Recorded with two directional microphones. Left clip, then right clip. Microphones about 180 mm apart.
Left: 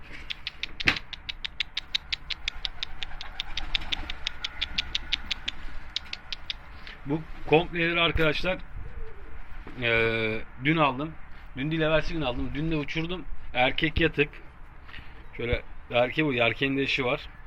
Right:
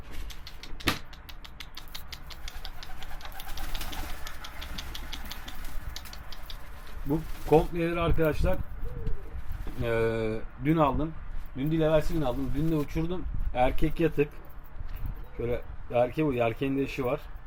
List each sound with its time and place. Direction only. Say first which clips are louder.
0.1 s rodents: left 12 dB; 35° right (ahead or behind)
7.1 s speech: even; 5° right (ahead or behind)
8.2 s speech: left 2 dB; 5° left (ahead or behind)
9.8 s speech: left 3 dB; 5° right (ahead or behind)
11.5 s speech: even; 20° right (ahead or behind); by 14.3 s centre (ahead or behind)
15.4 s speech: left 2 dB; 5° right (ahead or behind)